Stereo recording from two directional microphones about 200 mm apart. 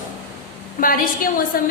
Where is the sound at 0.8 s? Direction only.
45° left (ahead or behind).